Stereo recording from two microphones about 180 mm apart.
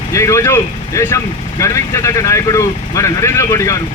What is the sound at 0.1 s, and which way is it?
Speech, 15° left (ahead or behind).